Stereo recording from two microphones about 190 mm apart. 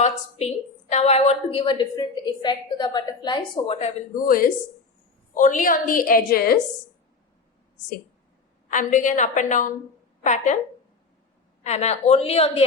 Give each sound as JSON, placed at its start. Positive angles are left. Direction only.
{"t": 0.0, "sound": "a woman's voice", "side_deg": 35}
{"t": 3.8, "sound": "a woman's voice", "side_deg": 35}
{"t": 5.4, "sound": "a woman's voice", "side_deg": 45}
{"t": 8.7, "sound": "a woman's voice", "side_deg": 45}
{"t": 11.6, "sound": "a woman's voice", "side_deg": 35}